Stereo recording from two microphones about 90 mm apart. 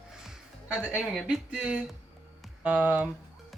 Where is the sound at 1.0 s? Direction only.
5° right (ahead or behind).